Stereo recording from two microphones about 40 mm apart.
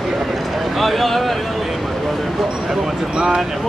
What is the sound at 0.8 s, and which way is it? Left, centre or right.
Speech, centre.